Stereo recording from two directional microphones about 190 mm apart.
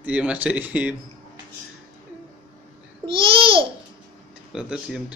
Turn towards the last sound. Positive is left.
turn(degrees=-5)  # may be behind; listen again after turning